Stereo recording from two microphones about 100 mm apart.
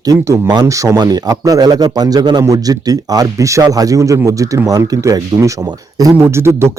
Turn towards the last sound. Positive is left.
turn(degrees=-25)  # may be behind; listen again after turning